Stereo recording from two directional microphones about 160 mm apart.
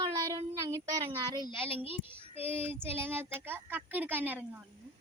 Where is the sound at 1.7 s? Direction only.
35° left (ahead or behind).